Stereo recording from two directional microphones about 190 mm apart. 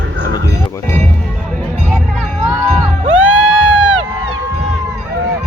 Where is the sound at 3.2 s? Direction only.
5° right (ahead or behind).